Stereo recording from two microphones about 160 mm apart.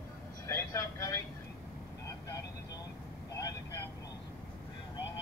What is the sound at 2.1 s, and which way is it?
Vehicle, 20° left (ahead or behind).